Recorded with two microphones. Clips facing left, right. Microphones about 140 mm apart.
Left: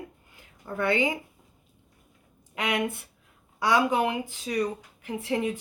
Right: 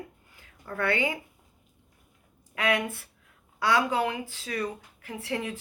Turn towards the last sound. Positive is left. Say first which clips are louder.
# left 5 dB
turn(degrees=20)  # may be behind; listen again after turning